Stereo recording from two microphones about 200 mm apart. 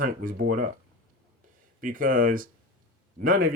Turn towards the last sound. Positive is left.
turn(degrees=-45)  # may be behind; listen again after turning